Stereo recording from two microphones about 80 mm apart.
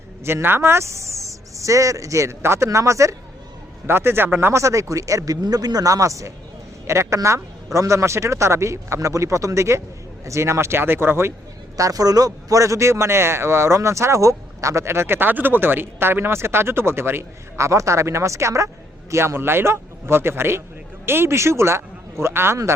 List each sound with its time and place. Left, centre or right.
0.3 s a man's voice: right
3.8 s a man's voice: right
11.8 s a man's voice: right